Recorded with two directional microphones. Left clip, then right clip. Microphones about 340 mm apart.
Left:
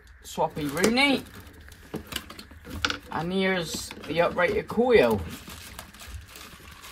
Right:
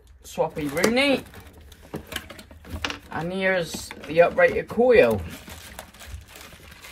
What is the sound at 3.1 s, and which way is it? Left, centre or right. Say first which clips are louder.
Speech: right 6 dB; centre.